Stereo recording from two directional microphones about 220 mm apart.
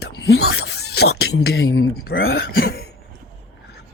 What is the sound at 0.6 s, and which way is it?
Beatboxing, 45° left (ahead or behind).